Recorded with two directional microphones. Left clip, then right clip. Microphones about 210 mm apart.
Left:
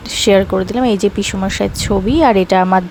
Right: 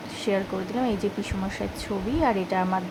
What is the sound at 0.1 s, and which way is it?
Speech, 45° left (ahead or behind).